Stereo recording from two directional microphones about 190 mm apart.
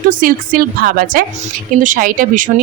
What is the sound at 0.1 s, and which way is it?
Speech, 45° right (ahead or behind).